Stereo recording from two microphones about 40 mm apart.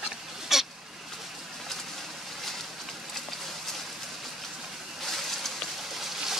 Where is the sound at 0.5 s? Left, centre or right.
Centre.